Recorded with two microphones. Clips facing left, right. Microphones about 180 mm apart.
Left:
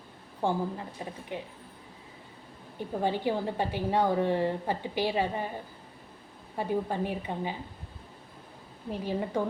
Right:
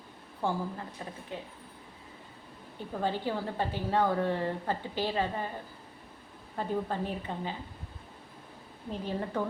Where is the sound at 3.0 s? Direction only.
15° left (ahead or behind).